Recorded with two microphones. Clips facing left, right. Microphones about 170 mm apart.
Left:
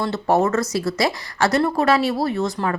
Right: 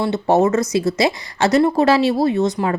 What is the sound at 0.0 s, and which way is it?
Speech, 20° right (ahead or behind).